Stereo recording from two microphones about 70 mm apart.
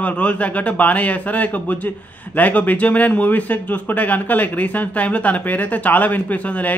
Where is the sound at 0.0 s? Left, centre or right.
Centre.